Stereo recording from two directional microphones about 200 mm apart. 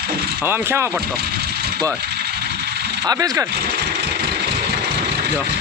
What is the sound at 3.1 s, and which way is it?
Speech, 15° right (ahead or behind).